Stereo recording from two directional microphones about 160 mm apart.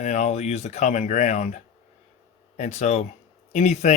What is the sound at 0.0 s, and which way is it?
Speech, 45° left (ahead or behind).